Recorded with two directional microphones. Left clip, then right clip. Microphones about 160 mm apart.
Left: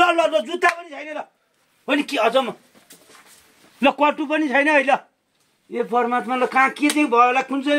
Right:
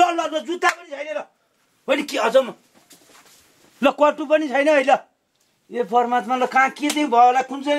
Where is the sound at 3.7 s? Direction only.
15° right (ahead or behind).